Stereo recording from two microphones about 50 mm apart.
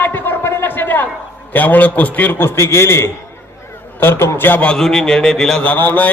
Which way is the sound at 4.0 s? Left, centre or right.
Left.